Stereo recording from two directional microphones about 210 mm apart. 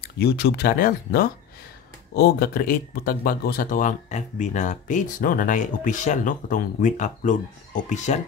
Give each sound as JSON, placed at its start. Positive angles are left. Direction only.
{"t": 0.2, "sound": "speech", "side_deg": 50}